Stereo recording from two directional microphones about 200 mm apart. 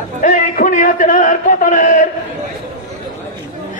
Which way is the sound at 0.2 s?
40° left (ahead or behind).